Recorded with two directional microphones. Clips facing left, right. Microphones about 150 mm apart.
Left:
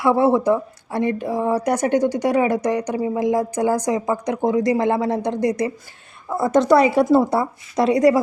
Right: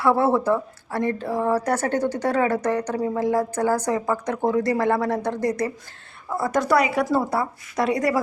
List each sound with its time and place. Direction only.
0.0 s a woman's voice: 15° left (ahead or behind)